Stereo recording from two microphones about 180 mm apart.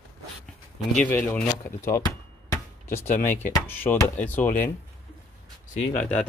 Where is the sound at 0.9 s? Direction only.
5° left (ahead or behind).